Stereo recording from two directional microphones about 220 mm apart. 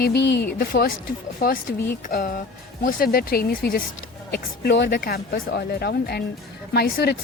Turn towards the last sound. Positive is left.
turn(degrees=45)  # may be behind; listen again after turning